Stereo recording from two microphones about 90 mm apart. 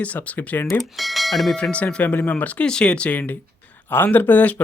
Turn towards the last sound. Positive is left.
turn(degrees=20)  # may be behind; listen again after turning